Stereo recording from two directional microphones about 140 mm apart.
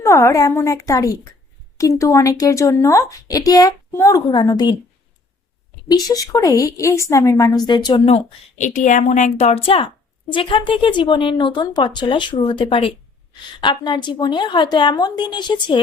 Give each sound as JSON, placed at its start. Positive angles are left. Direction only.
{"t": 0.0, "sound": "a woman's voice", "side_deg": 20}
{"t": 5.9, "sound": "a woman's voice", "side_deg": 25}
{"t": 8.5, "sound": "a woman's voice", "side_deg": 65}